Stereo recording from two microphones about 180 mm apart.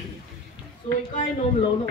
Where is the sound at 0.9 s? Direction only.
35° left (ahead or behind).